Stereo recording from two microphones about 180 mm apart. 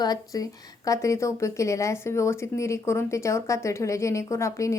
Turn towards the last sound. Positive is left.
turn(degrees=15)  # may be behind; listen again after turning